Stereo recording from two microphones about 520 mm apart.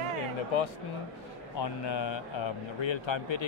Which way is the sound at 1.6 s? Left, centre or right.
Left.